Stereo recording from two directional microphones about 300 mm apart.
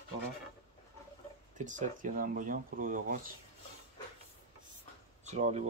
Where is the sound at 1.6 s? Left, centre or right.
Right.